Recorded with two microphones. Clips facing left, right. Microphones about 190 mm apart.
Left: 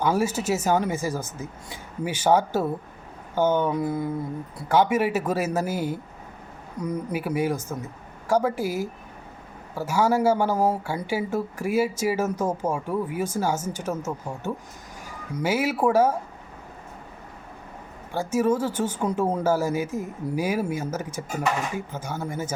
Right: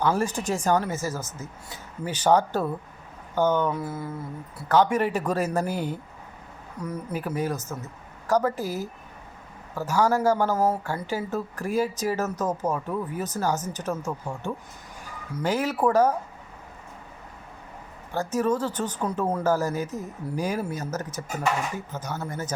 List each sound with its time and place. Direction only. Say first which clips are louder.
0.0 s speech: left 1 dB; 10° left (ahead or behind)
6.8 s speech: left 3 dB; 10° left (ahead or behind)
18.1 s speech: left 2 dB; 10° left (ahead or behind)